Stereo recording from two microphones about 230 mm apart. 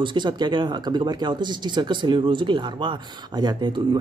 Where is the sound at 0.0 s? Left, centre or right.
Centre.